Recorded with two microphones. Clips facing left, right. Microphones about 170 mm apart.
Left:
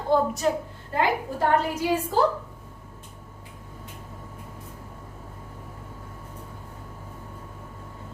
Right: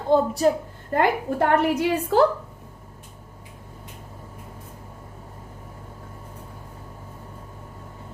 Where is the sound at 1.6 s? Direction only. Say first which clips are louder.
Right 4 dB; 65° right (ahead or behind).